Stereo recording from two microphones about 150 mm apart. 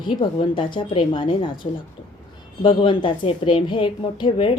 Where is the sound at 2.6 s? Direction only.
35° left (ahead or behind).